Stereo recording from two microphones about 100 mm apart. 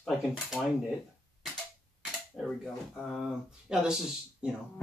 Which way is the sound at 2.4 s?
5° right (ahead or behind).